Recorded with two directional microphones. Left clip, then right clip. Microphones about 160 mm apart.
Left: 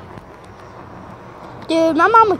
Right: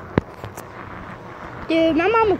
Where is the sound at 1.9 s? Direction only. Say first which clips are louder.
Left 6 dB; 15° right (ahead or behind).